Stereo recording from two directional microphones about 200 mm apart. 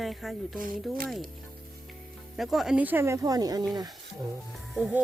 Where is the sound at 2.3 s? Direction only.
Centre (ahead or behind); by 3.9 s 20° right (ahead or behind).